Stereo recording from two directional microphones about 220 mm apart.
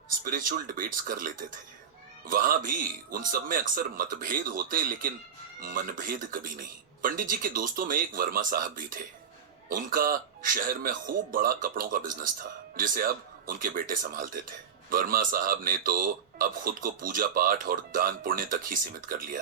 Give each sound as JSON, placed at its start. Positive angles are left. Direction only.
{"t": 0.1, "sound": "speech", "side_deg": -40}